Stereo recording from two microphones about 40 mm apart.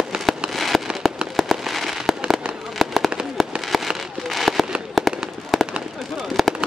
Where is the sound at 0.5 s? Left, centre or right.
Centre.